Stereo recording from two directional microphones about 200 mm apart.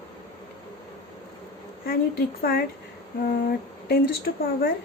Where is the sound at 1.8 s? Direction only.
50° left (ahead or behind).